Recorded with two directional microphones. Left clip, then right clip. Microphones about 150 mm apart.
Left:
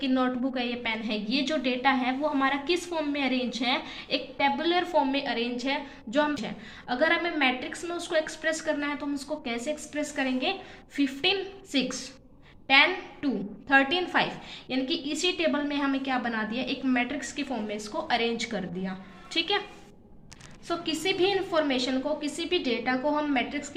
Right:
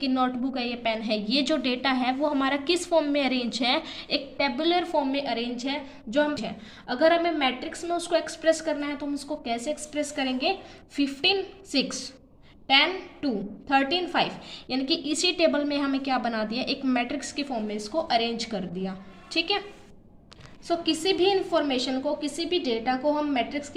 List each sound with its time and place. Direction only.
0.0 s a woman's voice: 25° right (ahead or behind)
14.7 s a woman's voice: 35° right (ahead or behind)
20.7 s a woman's voice: 25° right (ahead or behind)